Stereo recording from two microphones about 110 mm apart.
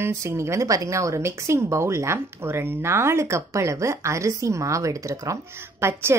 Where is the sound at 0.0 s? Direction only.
25° right (ahead or behind).